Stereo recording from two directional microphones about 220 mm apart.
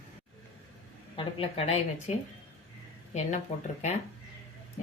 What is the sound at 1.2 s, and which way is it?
Speech, 25° left (ahead or behind).